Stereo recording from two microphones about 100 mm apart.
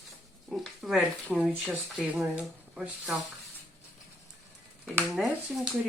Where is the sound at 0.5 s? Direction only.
Centre (ahead or behind).